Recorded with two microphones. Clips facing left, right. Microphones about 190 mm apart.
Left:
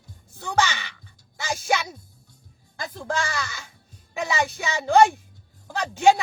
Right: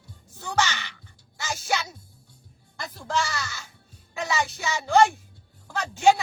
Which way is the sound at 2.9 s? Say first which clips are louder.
Even; 55° left (ahead or behind).